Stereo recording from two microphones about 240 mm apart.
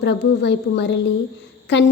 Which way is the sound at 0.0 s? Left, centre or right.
Left.